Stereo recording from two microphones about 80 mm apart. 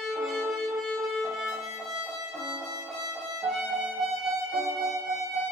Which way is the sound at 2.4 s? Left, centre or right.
Right.